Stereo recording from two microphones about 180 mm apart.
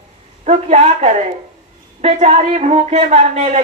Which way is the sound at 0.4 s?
40° right (ahead or behind).